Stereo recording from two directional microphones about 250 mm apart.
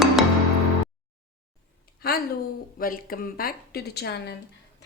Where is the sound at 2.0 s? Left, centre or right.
Left.